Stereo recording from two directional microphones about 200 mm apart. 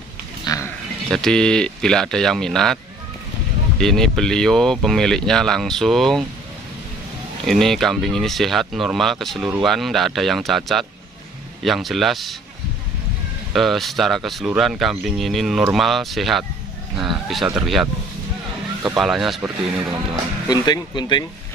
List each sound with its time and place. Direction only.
0.5 s pig: 20° left (ahead or behind)
1.1 s speech: 5° left (ahead or behind)
7.4 s speech: centre (ahead or behind)
13.5 s speech: centre (ahead or behind)
18.9 s speech: centre (ahead or behind)
19.4 s speech: 15° right (ahead or behind)
20.4 s speech: 20° left (ahead or behind)